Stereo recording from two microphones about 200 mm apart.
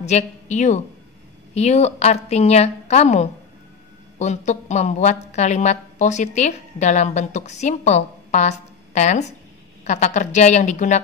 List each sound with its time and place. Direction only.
0.0 s a woman's voice: 35° left (ahead or behind)